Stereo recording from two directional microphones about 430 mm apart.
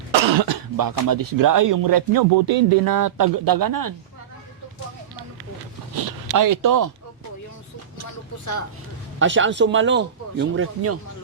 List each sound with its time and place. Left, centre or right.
0.1 s cough: right
0.5 s speech: right
6.0 s speech: right
9.1 s speech: right